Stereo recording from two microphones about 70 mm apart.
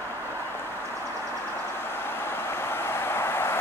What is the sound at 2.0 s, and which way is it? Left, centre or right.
Vehicle, left.